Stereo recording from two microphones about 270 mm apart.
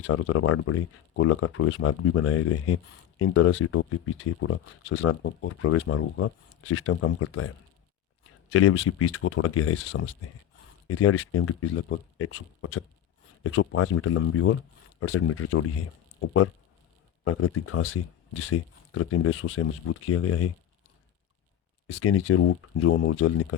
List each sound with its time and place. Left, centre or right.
0.1 s speech: left
8.5 s speech: left
10.8 s speech: left
17.2 s speech: left
21.8 s speech: left